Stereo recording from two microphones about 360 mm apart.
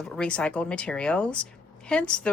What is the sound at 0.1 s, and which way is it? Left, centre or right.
Speech, centre.